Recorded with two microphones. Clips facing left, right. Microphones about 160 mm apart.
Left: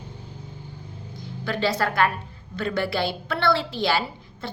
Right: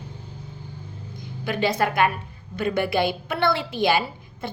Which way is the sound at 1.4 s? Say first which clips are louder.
Right 1 dB; 15° right (ahead or behind).